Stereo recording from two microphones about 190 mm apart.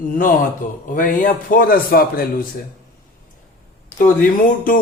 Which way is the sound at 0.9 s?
45° left (ahead or behind).